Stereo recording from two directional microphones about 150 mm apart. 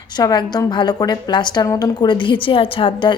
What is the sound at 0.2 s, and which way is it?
A woman's voice, 25° left (ahead or behind).